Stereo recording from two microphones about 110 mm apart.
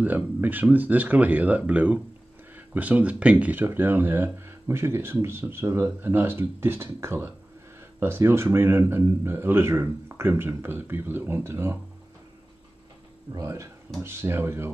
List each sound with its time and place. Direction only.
0.0 s speech: 15° right (ahead or behind)
13.3 s speech: 30° right (ahead or behind)